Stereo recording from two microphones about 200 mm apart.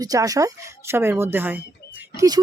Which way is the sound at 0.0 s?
15° right (ahead or behind).